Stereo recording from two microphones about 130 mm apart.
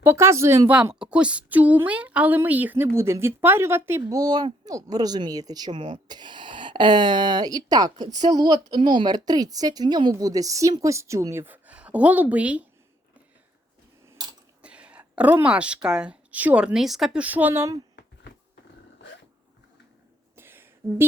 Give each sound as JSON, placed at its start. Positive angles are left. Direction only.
{"t": 0.0, "sound": "a woman's voice", "side_deg": -20}
{"t": 0.9, "sound": "a woman's voice", "side_deg": -5}
{"t": 14.6, "sound": "a woman's voice", "side_deg": -10}
{"t": 20.3, "sound": "a sound", "side_deg": -15}